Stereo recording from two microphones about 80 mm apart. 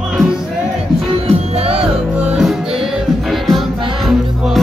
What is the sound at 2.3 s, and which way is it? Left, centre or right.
Music, centre.